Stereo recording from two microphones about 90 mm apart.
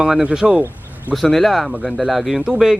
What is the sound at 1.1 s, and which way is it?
Speech, centre (ahead or behind).